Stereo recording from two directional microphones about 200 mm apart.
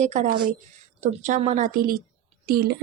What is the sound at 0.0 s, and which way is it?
A woman's voice, 40° right (ahead or behind).